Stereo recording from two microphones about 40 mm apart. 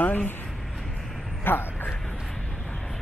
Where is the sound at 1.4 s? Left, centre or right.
Left.